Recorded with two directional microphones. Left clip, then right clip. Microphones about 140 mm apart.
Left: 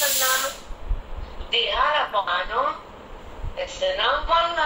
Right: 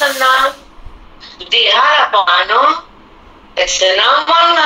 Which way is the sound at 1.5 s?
90° right.